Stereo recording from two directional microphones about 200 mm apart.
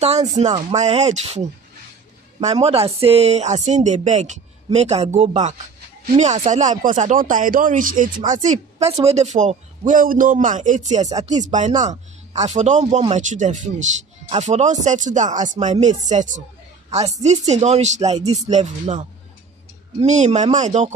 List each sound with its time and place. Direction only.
0.0 s speech: 35° right (ahead or behind)
2.4 s speech: 30° right (ahead or behind)